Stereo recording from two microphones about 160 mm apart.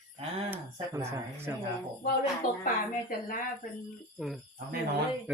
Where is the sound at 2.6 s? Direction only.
60° left (ahead or behind).